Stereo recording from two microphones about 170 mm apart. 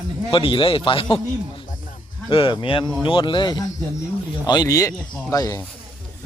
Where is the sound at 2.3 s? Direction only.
30° left (ahead or behind).